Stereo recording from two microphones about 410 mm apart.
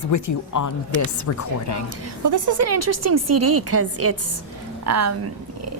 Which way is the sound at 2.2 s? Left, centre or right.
Right.